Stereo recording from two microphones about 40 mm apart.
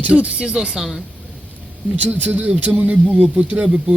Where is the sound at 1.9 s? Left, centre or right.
Right.